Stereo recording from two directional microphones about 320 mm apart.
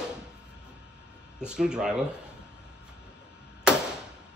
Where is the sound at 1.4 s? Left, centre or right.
Centre.